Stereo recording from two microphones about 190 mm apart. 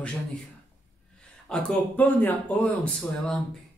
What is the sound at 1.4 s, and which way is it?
Speech, 5° left (ahead or behind).